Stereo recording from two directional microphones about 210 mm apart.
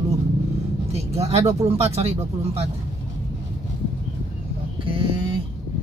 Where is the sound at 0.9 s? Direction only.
30° right (ahead or behind).